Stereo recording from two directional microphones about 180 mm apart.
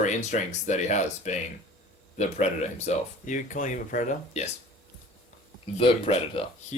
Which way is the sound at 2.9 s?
45° left (ahead or behind).